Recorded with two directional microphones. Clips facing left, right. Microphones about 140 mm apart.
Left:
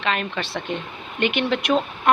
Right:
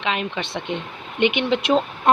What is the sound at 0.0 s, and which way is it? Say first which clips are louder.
Speech: even; 15° right (ahead or behind).